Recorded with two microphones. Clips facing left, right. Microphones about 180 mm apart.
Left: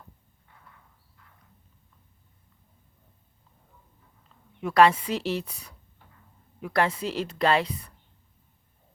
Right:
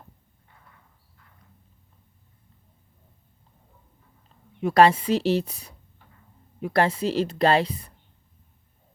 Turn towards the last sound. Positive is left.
turn(degrees=-30)  # may be behind; listen again after turning